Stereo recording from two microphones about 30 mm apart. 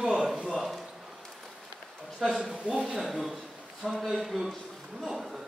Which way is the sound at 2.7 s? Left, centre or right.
Right.